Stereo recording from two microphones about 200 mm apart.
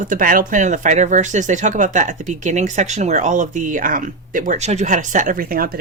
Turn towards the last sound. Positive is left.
turn(degrees=-45)  # may be behind; listen again after turning